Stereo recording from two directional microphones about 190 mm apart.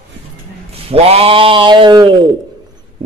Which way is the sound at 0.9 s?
30° right (ahead or behind).